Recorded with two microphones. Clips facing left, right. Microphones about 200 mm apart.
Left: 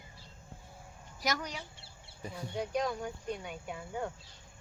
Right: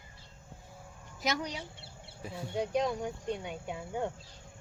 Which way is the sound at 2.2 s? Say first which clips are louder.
Right 1 dB; 5° right (ahead or behind).